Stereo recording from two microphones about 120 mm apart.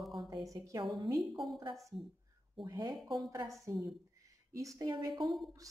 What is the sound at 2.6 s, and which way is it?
A woman's voice, 35° right (ahead or behind).